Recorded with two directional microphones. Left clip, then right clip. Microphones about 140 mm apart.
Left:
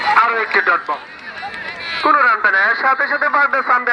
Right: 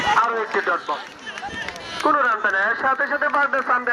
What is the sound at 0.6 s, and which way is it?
Speech, 50° left (ahead or behind).